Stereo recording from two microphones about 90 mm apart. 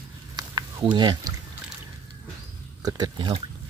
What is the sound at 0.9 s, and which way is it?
Speech, 55° right (ahead or behind).